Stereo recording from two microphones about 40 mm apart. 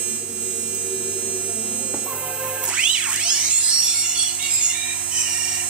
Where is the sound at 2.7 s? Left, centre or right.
Right.